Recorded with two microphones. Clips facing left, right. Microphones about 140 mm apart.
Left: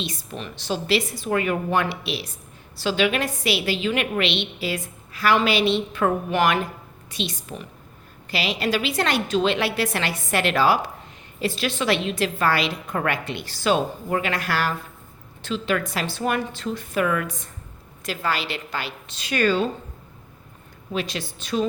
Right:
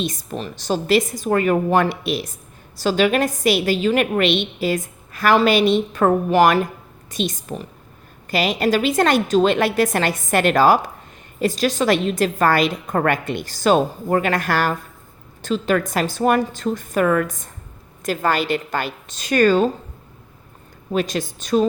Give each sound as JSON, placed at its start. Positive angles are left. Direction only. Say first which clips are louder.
{"t": 0.0, "sound": "a woman's voice", "louder": "right 6 dB", "side_deg": -45}
{"t": 20.9, "sound": "a woman's voice", "louder": "right 6 dB", "side_deg": -45}